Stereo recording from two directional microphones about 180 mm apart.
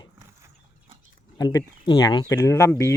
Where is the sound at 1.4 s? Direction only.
20° left (ahead or behind).